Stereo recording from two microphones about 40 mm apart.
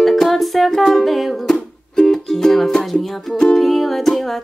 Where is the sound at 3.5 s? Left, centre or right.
Centre.